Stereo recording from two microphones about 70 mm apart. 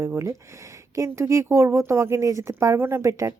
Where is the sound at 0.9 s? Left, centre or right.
Right.